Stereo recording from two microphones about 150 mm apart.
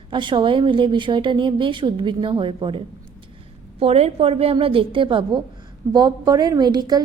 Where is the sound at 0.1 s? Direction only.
30° right (ahead or behind).